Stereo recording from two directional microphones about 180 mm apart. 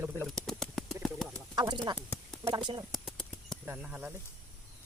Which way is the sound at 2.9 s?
Centre (ahead or behind).